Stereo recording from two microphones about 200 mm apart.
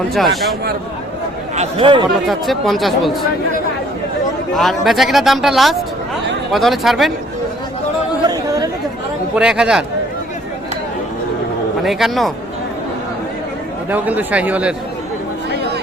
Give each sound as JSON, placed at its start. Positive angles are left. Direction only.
{"t": 1.5, "sound": "speech", "side_deg": -25}
{"t": 2.2, "sound": "speech", "side_deg": 0}
{"t": 4.5, "sound": "speech", "side_deg": 0}
{"t": 8.2, "sound": "chatter", "side_deg": -20}
{"t": 9.3, "sound": "speech", "side_deg": -5}
{"t": 11.8, "sound": "speech", "side_deg": 0}
{"t": 13.9, "sound": "speech", "side_deg": -10}